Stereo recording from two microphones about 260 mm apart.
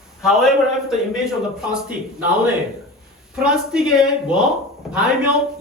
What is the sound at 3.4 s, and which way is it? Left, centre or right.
Speech, centre.